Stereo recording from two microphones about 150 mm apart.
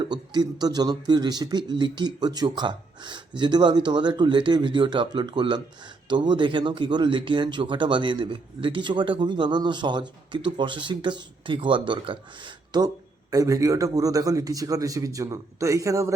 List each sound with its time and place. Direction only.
0.0 s a man's voice: 30° right (ahead or behind)